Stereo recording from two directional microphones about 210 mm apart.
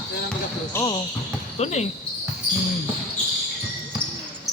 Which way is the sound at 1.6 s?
30° left (ahead or behind).